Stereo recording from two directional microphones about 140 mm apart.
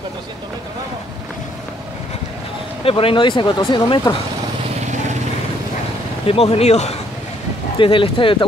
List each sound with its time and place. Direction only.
2.8 s speech: 40° left (ahead or behind)
6.2 s speech: 45° left (ahead or behind)
7.8 s speech: 40° left (ahead or behind)